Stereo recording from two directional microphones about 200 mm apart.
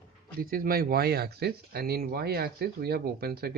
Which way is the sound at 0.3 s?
45° right (ahead or behind).